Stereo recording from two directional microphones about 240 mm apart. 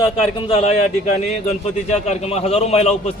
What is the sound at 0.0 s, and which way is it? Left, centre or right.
A man's voice, centre.